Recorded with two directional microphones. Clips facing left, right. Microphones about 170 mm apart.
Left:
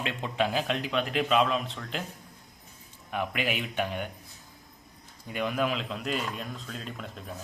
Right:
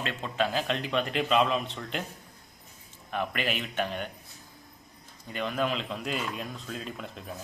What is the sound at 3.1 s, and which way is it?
Speech, 10° left (ahead or behind).